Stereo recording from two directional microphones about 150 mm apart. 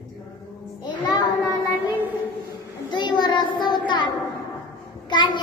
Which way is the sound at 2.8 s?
30° left (ahead or behind).